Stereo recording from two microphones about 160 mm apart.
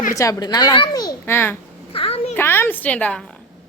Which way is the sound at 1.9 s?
35° left (ahead or behind).